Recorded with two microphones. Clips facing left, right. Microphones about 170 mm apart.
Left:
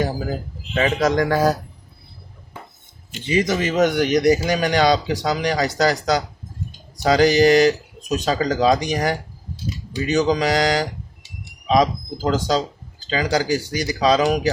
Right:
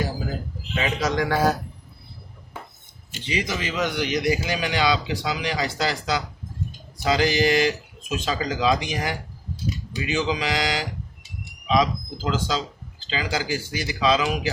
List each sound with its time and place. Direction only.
0.7 s speech: 55° left (ahead or behind)
3.2 s speech: 45° left (ahead or behind)